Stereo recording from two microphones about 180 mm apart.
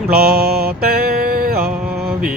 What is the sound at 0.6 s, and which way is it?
Mantra, 55° right (ahead or behind).